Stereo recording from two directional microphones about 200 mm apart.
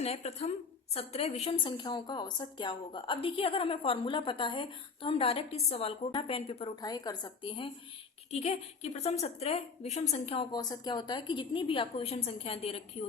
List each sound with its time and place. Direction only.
0.0 s a woman's voice: 30° left (ahead or behind)
10.5 s a woman's voice: 20° left (ahead or behind)